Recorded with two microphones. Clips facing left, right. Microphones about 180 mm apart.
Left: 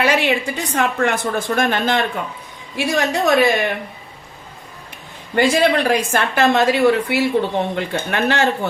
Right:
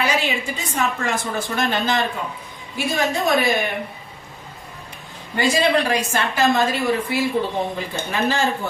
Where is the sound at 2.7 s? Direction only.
75° left (ahead or behind).